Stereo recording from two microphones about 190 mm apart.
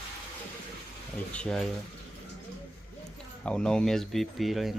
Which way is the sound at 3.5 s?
5° left (ahead or behind).